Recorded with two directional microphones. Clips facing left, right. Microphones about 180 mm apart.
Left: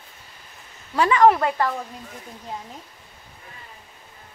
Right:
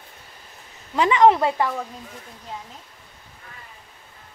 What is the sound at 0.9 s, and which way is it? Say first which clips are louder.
Speech: even; 20° right (ahead or behind).